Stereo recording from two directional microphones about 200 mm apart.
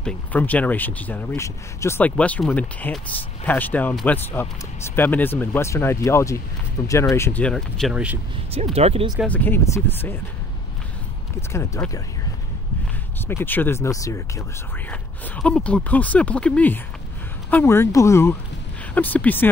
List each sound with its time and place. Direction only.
0.0 s speech: 10° left (ahead or behind)
8.7 s speech: 30° right (ahead or behind)
9.1 s speech: 5° left (ahead or behind)
11.5 s speech: 15° left (ahead or behind)
13.3 s speech: 10° left (ahead or behind)